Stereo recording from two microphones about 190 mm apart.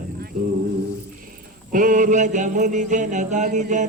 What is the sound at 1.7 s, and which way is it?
Mantra, 45° right (ahead or behind).